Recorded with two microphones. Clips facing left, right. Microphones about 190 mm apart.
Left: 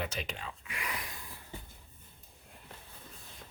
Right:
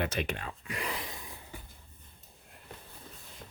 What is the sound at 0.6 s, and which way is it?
Speech, 35° right (ahead or behind).